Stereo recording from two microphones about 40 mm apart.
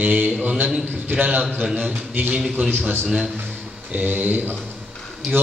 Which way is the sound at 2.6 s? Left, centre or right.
Right.